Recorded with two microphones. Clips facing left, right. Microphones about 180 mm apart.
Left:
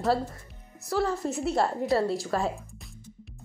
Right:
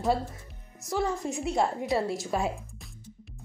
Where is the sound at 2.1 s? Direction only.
20° right (ahead or behind).